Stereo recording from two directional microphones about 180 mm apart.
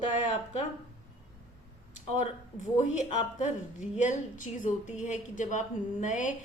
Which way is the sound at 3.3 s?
40° left (ahead or behind).